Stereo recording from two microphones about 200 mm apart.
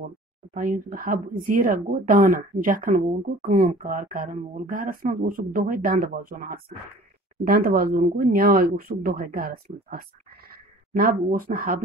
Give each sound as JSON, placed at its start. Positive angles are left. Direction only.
{"t": 0.6, "sound": "speech", "side_deg": -40}